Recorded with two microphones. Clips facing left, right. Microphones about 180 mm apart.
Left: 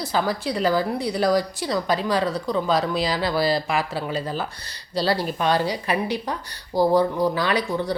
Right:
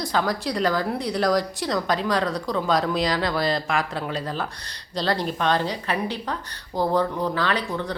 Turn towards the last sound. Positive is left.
turn(degrees=10)  # may be behind; listen again after turning